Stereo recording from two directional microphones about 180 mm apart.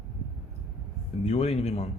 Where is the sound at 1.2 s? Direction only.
35° left (ahead or behind).